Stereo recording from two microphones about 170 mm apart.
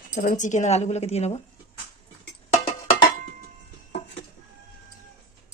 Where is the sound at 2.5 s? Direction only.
35° left (ahead or behind).